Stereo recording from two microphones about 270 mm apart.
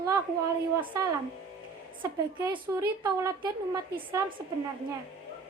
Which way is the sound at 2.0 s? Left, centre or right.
Centre.